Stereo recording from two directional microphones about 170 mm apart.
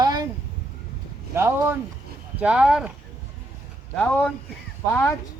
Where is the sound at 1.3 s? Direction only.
15° right (ahead or behind).